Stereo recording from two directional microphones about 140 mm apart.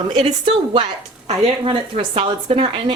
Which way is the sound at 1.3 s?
40° right (ahead or behind).